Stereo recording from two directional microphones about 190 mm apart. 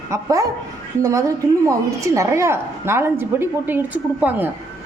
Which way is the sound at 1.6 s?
15° right (ahead or behind).